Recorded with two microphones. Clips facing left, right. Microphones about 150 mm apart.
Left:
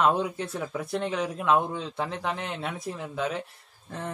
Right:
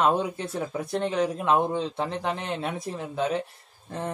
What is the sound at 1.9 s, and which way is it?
Speech, centre (ahead or behind).